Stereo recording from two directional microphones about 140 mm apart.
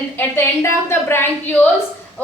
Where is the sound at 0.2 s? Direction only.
15° left (ahead or behind).